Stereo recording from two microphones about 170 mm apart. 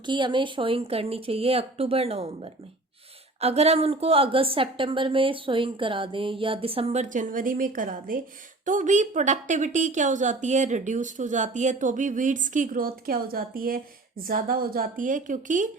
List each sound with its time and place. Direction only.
0.0 s a woman's voice: 25° right (ahead or behind); by 15.7 s 50° right (ahead or behind)